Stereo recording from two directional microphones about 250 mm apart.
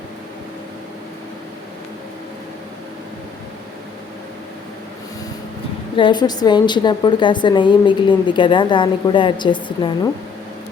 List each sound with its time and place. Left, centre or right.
6.0 s a woman's voice: centre